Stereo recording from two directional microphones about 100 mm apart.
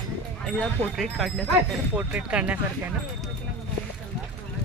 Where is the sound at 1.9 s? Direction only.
10° right (ahead or behind).